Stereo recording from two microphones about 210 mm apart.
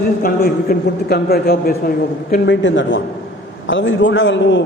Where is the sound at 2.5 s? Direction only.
60° left (ahead or behind).